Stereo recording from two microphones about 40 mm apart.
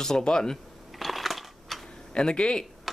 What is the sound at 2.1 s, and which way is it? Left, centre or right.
Speech, left.